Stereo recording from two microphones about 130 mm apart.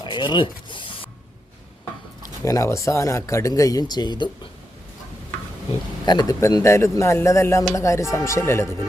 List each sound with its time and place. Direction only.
0.0 s speech: 35° left (ahead or behind)
2.4 s speech: 25° left (ahead or behind)
6.1 s speech: 35° left (ahead or behind)
6.4 s speech: 20° left (ahead or behind)